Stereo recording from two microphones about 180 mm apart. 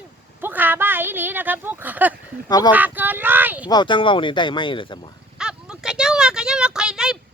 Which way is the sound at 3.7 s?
25° left (ahead or behind).